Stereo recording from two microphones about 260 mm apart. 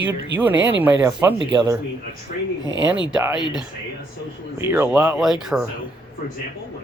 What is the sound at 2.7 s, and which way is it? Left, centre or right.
Speech, right.